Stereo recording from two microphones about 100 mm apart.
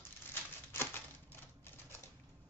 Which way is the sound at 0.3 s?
20° left (ahead or behind).